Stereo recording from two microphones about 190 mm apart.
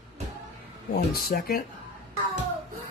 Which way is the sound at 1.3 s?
50° left (ahead or behind).